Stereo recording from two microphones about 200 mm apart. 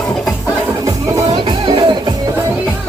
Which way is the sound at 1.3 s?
25° right (ahead or behind).